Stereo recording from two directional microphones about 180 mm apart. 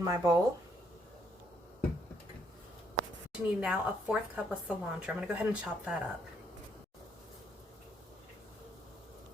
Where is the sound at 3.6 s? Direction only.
5° right (ahead or behind).